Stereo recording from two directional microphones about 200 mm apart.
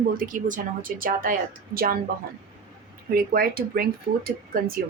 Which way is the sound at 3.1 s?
50° right (ahead or behind).